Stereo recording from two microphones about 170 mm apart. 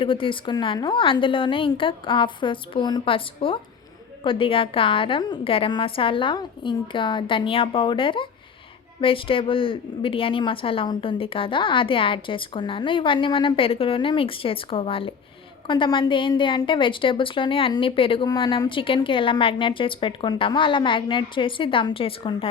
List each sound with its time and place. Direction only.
0.0 s a woman's voice: 30° left (ahead or behind)